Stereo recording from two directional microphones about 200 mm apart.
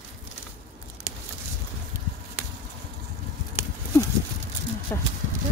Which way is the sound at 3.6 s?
10° right (ahead or behind).